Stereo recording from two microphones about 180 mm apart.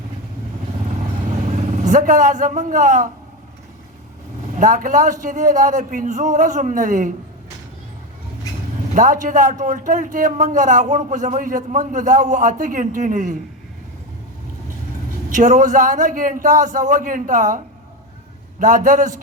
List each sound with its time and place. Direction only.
1.5 s a man's voice: 40° right (ahead or behind)
4.5 s a man's voice: 45° right (ahead or behind)
9.0 s a man's voice: 45° right (ahead or behind)
15.3 s a man's voice: 45° right (ahead or behind)
18.6 s a man's voice: 45° right (ahead or behind)